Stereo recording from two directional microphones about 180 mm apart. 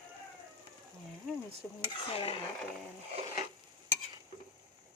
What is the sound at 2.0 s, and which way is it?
Stir, 30° left (ahead or behind).